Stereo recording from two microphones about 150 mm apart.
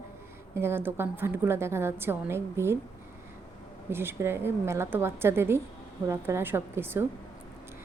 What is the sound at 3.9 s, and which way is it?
A woman's voice, 15° right (ahead or behind).